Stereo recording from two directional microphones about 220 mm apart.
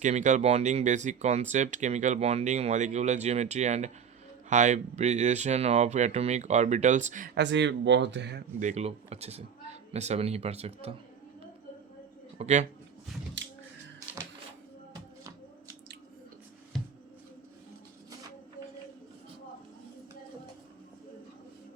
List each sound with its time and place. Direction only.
0.0 s speech: 35° right (ahead or behind)
7.3 s speech: 55° right (ahead or behind)
8.5 s speech: 30° right (ahead or behind)
12.4 s speech: 30° right (ahead or behind)
13.4 s a sound: 55° right (ahead or behind)
15.2 s finger snapping: 15° right (ahead or behind)
16.7 s a sound: centre (ahead or behind)